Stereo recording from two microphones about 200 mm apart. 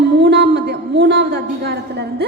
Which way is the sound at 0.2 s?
60° right (ahead or behind).